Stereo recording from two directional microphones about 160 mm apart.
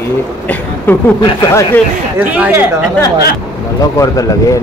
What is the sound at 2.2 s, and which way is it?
Speech, 10° right (ahead or behind).